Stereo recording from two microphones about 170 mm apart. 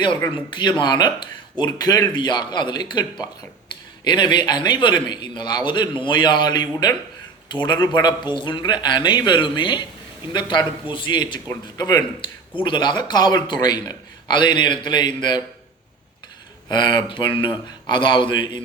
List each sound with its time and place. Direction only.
0.3 s a man's voice: 25° left (ahead or behind)
16.6 s a man's voice: 25° left (ahead or behind)